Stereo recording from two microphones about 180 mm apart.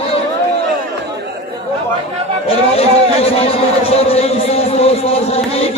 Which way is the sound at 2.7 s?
35° left (ahead or behind).